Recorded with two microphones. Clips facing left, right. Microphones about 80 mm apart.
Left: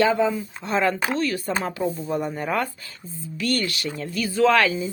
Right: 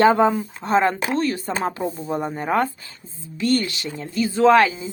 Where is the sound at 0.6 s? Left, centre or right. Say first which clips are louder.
Right 3 dB; right.